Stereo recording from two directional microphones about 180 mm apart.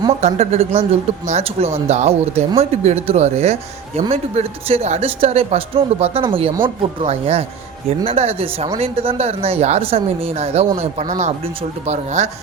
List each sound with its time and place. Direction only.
0.2 s speech: 35° right (ahead or behind)